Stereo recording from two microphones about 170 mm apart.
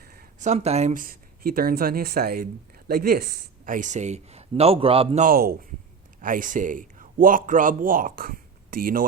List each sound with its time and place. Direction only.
0.0 s speech: 60° right (ahead or behind); by 5.2 s 35° right (ahead or behind)
5.2 s speech: 60° right (ahead or behind)